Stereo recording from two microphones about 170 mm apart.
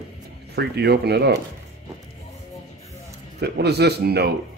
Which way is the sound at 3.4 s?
75° right (ahead or behind).